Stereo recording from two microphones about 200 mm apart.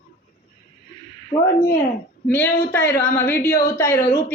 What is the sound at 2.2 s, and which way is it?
Speech, 10° left (ahead or behind).